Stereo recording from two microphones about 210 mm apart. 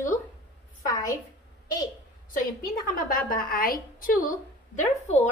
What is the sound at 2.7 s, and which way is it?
A woman's voice, 45° left (ahead or behind).